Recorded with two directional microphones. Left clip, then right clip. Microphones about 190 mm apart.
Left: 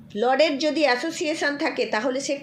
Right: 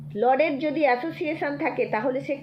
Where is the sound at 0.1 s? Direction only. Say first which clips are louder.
Left 1 dB; 25° left (ahead or behind).